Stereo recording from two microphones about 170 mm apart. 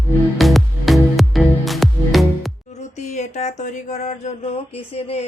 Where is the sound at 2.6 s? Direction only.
40° left (ahead or behind).